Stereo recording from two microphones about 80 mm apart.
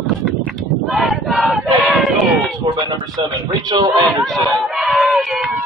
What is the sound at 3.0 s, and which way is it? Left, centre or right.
Speech, right.